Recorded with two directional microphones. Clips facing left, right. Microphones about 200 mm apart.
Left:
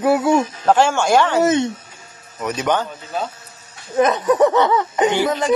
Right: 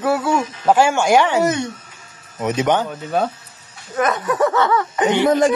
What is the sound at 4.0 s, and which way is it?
Speech, 20° left (ahead or behind).